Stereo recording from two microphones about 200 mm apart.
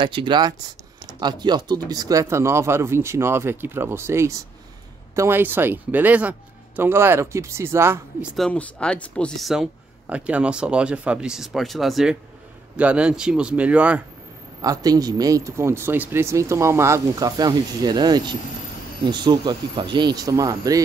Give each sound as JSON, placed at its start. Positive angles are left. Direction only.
{"t": 0.0, "sound": "speech", "side_deg": -25}
{"t": 8.4, "sound": "speech", "side_deg": 5}
{"t": 14.6, "sound": "speech", "side_deg": -20}